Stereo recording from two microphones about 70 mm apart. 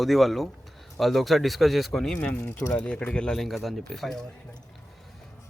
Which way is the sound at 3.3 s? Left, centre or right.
Centre.